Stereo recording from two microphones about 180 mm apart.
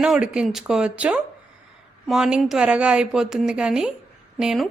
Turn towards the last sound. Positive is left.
turn(degrees=0)  # may be behind; listen again after turning